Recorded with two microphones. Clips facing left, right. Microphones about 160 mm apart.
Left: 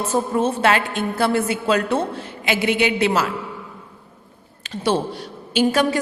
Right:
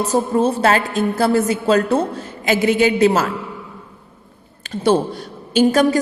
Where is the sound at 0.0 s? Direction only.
35° right (ahead or behind).